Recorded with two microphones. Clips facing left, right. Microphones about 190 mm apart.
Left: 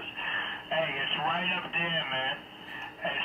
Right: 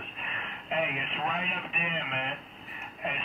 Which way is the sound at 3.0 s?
15° right (ahead or behind).